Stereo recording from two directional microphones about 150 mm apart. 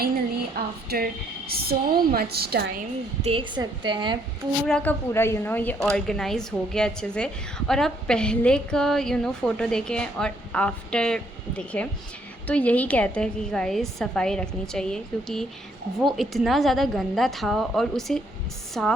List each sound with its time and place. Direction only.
0.9 s speech: 85° right
3.2 s a woman's voice: 45° right (ahead or behind)
3.5 s speech: 30° right (ahead or behind)
4.6 s a woman's voice: 5° left (ahead or behind)